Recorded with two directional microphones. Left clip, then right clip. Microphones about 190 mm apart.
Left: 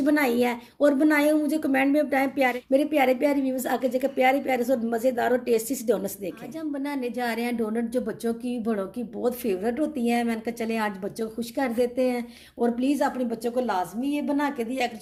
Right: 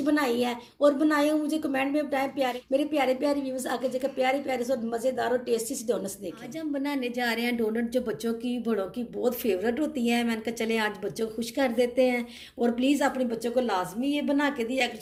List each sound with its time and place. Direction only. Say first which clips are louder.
0.0 s a woman's voice: left 3 dB; 45° left (ahead or behind)